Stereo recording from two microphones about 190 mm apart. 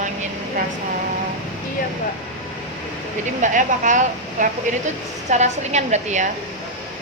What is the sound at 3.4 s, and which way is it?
A woman's voice, 40° right (ahead or behind).